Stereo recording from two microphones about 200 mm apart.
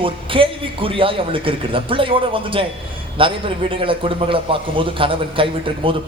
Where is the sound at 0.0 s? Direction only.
25° right (ahead or behind).